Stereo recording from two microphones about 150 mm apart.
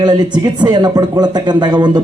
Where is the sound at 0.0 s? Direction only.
25° right (ahead or behind).